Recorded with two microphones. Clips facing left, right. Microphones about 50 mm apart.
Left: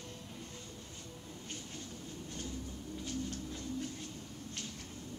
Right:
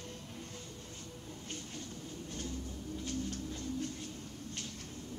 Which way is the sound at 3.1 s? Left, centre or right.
Centre.